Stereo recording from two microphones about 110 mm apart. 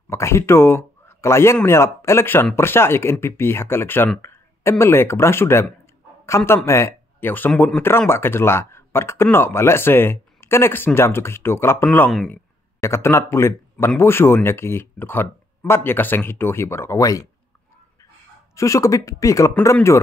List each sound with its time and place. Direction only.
0.1 s speech: 25° left (ahead or behind)
18.5 s speech: 30° left (ahead or behind)